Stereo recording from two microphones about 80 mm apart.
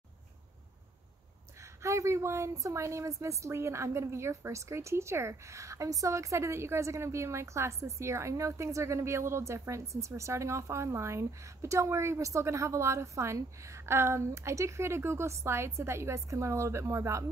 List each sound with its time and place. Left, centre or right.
1.6 s a woman's voice: right